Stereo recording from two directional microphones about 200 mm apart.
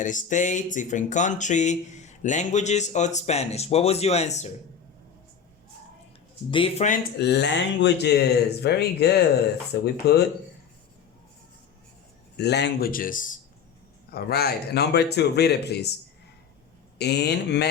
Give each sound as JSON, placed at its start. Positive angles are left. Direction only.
{"t": 0.0, "sound": "speech", "side_deg": 40}
{"t": 6.5, "sound": "speech", "side_deg": 25}
{"t": 7.2, "sound": "a man's voice", "side_deg": 55}
{"t": 12.4, "sound": "a man's voice", "side_deg": 55}
{"t": 17.0, "sound": "speech", "side_deg": 55}